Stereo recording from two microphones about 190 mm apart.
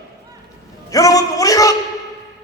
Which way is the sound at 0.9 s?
20° left (ahead or behind).